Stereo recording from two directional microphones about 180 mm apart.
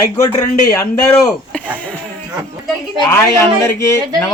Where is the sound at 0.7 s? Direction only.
15° left (ahead or behind).